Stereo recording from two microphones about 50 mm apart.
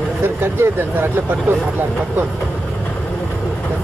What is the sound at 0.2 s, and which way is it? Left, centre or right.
Speech, right.